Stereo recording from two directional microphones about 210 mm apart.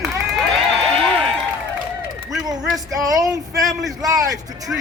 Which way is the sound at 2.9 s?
15° right (ahead or behind).